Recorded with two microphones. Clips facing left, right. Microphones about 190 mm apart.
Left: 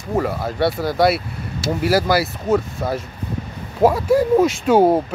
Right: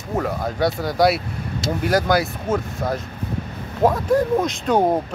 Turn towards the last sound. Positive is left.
turn(degrees=5)  # may be behind; listen again after turning